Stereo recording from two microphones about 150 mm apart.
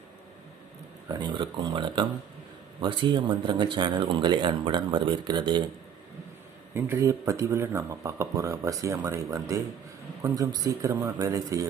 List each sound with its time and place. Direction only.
1.0 s speech: 30° right (ahead or behind)
6.7 s speech: 15° right (ahead or behind)